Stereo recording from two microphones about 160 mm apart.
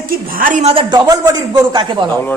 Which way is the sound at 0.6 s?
30° right (ahead or behind).